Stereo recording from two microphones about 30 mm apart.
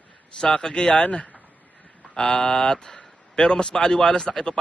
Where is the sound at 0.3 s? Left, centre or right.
Left.